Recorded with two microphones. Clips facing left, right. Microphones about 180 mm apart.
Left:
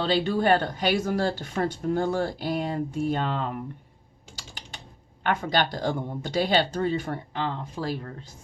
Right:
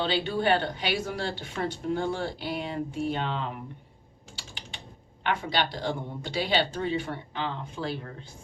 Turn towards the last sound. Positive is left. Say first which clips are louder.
# left 2 dB
turn(degrees=40)  # may be behind; listen again after turning